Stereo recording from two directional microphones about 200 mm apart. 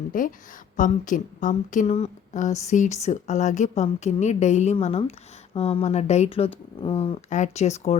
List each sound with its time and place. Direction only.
0.1 s a woman's voice: 45° left (ahead or behind)